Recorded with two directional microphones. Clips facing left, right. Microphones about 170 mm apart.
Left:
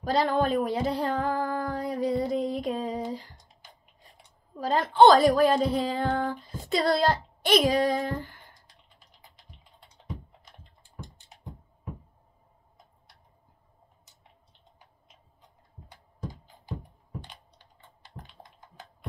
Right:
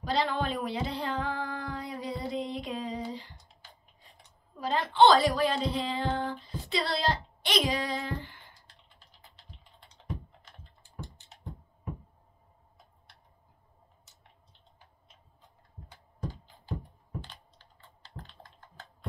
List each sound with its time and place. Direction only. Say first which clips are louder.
0.0 s a sound: left 5 dB; 45° left (ahead or behind)
4.6 s speech: left 4 dB; 45° left (ahead or behind)
17.2 s computer keyboard: even; 15° left (ahead or behind)